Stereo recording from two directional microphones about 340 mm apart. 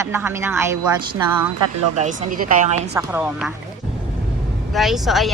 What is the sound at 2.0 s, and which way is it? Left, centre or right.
Speech, right.